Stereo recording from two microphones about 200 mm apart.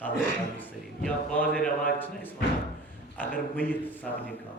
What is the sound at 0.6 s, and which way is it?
A man's voice, 5° left (ahead or behind).